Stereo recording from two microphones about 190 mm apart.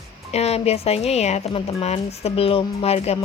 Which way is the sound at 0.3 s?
35° left (ahead or behind).